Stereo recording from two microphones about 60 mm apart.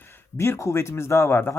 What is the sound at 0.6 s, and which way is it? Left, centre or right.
Speech, left.